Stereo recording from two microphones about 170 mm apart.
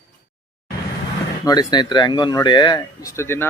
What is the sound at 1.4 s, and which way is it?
Speech, 20° left (ahead or behind).